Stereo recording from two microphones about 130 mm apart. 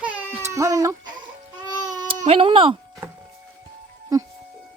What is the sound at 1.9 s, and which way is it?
Baby cry, 70° right (ahead or behind).